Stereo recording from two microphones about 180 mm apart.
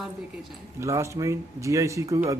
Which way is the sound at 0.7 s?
15° right (ahead or behind).